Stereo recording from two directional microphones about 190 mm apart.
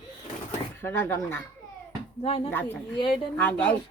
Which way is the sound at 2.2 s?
30° left (ahead or behind).